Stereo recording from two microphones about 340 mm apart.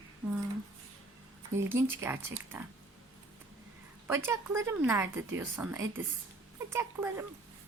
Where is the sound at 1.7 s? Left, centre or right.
Centre.